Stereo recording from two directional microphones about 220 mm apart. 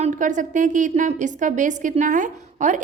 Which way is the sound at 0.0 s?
35° right (ahead or behind).